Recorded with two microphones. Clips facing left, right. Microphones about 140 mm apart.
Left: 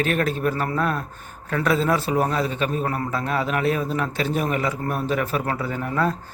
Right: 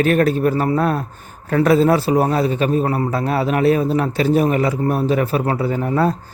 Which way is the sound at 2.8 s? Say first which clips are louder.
Right 6 dB; 30° right (ahead or behind).